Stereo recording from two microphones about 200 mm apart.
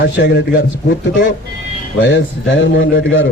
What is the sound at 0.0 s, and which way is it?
Speech, 60° left (ahead or behind).